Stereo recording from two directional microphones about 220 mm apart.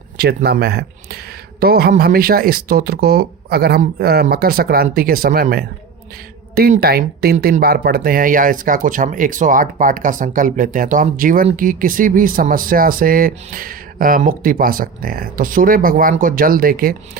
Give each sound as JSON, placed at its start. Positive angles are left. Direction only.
{"t": 0.2, "sound": "speech", "side_deg": -45}